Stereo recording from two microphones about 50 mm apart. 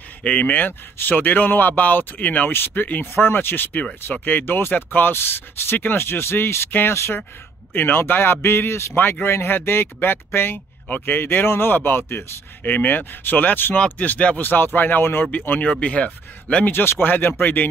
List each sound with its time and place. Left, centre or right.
0.2 s speech: left
0.6 s speech: left
3.7 s speech: left
4.2 s speech: left
5.1 s speech: left
8.9 s speech: left
12.6 s speech: left
15.6 s speech: left
17.0 s speech: left